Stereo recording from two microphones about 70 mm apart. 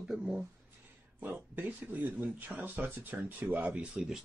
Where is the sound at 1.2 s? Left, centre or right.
Right.